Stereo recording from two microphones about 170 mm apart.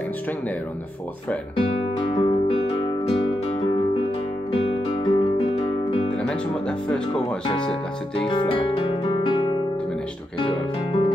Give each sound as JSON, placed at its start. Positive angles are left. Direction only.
{"t": 2.0, "sound": "music", "side_deg": 30}
{"t": 4.5, "sound": "guitar", "side_deg": 30}
{"t": 7.4, "sound": "speech", "side_deg": 30}
{"t": 8.2, "sound": "music", "side_deg": 30}